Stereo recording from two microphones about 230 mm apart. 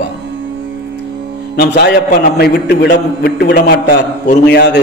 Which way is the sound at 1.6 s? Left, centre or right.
Left.